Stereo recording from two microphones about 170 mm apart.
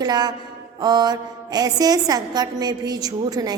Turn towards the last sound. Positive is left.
turn(degrees=-20)  # may be behind; listen again after turning